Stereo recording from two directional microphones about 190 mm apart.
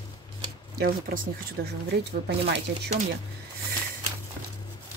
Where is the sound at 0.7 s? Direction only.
50° right (ahead or behind).